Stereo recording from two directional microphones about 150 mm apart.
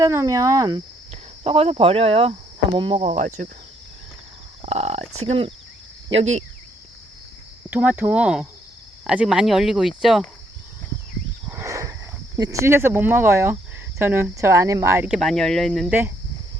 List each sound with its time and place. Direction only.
0.0 s speech: 20° right (ahead or behind)
1.1 s speech: 45° right (ahead or behind)
3.1 s cricket: 55° right (ahead or behind)
4.6 s speech: 45° right (ahead or behind)
7.7 s speech: 10° right (ahead or behind)
11.4 s wild animals: 15° right (ahead or behind)
12.4 s speech: 20° right (ahead or behind)
15.0 s speech: centre (ahead or behind)
15.9 s speech: 15° right (ahead or behind)